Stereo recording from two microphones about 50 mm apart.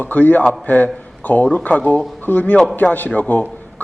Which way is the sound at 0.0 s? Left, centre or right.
Left.